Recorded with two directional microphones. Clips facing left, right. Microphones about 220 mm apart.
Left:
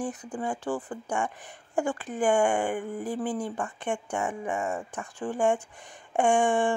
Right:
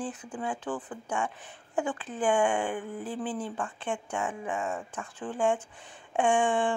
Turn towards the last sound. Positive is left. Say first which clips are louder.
# left 2 dB
turn(degrees=10)  # may be behind; listen again after turning